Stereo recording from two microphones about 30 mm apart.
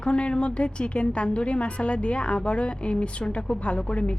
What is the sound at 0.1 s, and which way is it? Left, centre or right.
A woman's voice, left.